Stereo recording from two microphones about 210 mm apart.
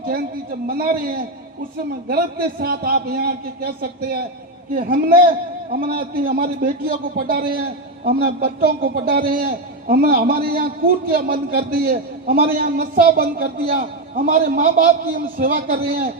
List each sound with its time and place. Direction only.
0.0 s a man's voice: 45° right (ahead or behind)
8.6 s a man's voice: 45° right (ahead or behind)